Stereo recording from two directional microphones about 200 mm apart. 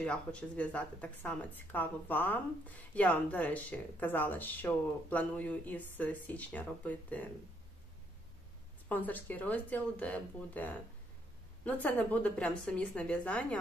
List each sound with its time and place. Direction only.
0.0 s a woman's voice: 5° left (ahead or behind)
8.8 s a woman's voice: 10° left (ahead or behind)